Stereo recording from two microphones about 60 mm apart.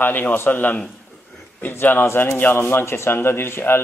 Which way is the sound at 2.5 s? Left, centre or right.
Left.